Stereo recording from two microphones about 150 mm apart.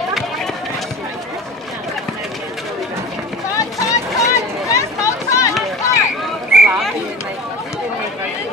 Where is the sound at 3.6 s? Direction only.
20° left (ahead or behind).